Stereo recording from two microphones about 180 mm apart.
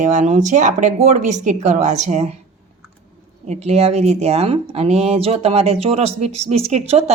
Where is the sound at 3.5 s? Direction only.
35° right (ahead or behind).